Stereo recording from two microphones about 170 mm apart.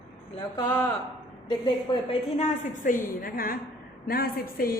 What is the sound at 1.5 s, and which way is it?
A woman's voice, 30° left (ahead or behind).